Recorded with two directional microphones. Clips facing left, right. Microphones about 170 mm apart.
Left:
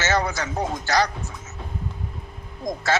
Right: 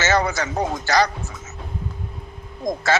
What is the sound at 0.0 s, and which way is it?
A man's voice, 90° right.